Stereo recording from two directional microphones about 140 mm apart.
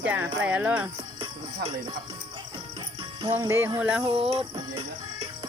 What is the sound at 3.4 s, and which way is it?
Speech, 20° right (ahead or behind).